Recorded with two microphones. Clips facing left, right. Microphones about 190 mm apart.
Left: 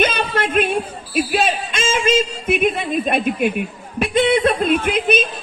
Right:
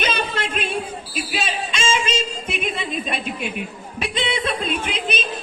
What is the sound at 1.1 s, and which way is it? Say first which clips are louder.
Speech: left 9 dB; 55° left (ahead or behind).